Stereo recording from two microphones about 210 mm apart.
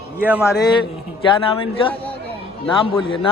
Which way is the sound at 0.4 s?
15° left (ahead or behind).